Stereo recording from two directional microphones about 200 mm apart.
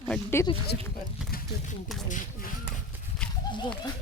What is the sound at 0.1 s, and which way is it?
Speech, 10° left (ahead or behind).